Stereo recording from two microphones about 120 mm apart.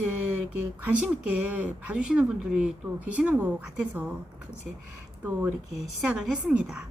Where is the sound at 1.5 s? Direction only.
10° right (ahead or behind).